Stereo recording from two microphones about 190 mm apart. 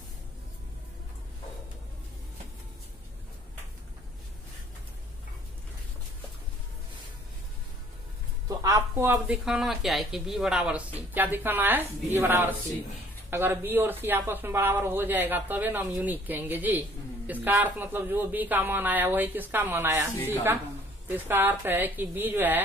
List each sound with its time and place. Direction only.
8.5 s speech: 15° right (ahead or behind)
21.1 s speech: 10° right (ahead or behind)